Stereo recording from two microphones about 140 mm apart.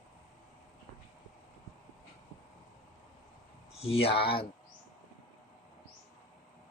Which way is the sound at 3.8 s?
45° left (ahead or behind).